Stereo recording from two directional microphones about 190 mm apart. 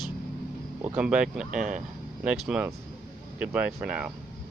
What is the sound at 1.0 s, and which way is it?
Speech, 5° right (ahead or behind).